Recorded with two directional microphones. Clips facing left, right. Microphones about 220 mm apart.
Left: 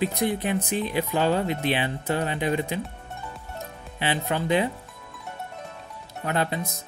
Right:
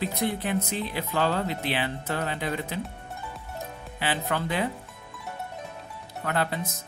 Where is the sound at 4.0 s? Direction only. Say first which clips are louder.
Left 2 dB; 20° left (ahead or behind).